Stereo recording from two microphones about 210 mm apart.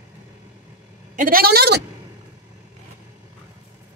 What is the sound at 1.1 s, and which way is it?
Speech, 40° right (ahead or behind).